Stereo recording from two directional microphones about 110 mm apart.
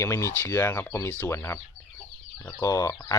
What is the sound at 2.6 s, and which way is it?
Speech, 30° left (ahead or behind).